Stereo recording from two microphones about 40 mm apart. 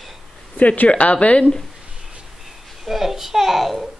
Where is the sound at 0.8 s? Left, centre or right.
Left.